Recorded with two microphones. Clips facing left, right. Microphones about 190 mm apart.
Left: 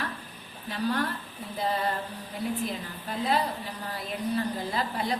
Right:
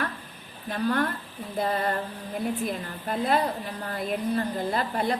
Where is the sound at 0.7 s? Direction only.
55° right (ahead or behind).